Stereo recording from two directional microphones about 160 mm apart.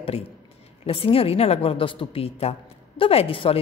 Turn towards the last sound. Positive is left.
turn(degrees=35)  # may be behind; listen again after turning